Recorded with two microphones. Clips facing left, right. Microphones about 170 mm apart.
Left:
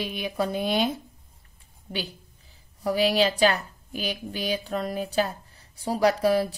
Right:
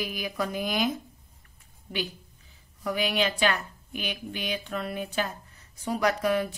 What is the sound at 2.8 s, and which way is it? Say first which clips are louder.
A woman's voice: left 5 dB; 35° left (ahead or behind).